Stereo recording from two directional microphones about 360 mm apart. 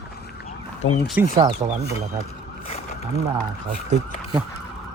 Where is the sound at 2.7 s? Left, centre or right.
Centre.